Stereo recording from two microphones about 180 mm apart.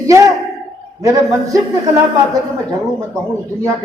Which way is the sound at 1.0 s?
20° right (ahead or behind).